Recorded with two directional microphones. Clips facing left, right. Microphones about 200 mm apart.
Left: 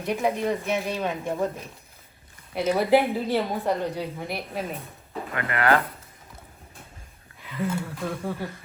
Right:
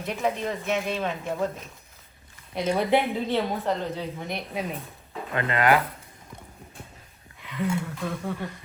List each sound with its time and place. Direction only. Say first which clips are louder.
0.0 s speech: left 3 dB; 15° left (ahead or behind)
2.6 s speech: left 3 dB; 5° left (ahead or behind)
5.3 s speech: right 1 dB; 20° right (ahead or behind)
7.5 s speech: right 1 dB; centre (ahead or behind)